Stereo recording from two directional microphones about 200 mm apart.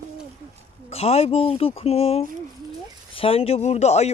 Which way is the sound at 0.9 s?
30° left (ahead or behind).